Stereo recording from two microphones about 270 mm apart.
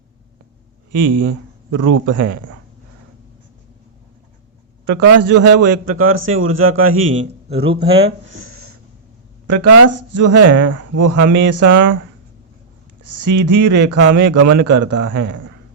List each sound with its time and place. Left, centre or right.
0.9 s speech: right
4.9 s a man's voice: right
7.5 s speech: centre
8.3 s a sound: right
9.5 s speech: right
13.0 s speech: right